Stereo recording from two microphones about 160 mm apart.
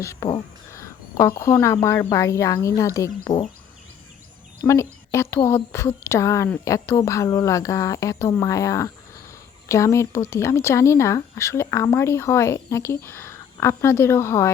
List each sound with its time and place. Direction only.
0.7 s speech: 20° left (ahead or behind)
3.2 s speech: 30° left (ahead or behind)
4.6 s a woman's voice: 20° left (ahead or behind)